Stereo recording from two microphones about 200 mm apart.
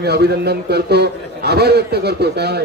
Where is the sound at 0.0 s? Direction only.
55° right (ahead or behind).